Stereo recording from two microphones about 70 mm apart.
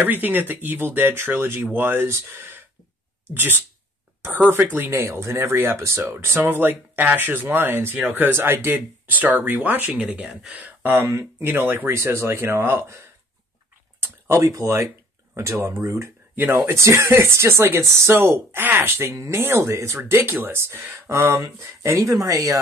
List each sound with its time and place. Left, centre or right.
0.0 s speech: right
4.7 s speech: right
8.7 s speech: right
10.8 s speech: right
13.9 s a sound: right
14.4 s speech: right
21.9 s speech: right
22.2 s speech: right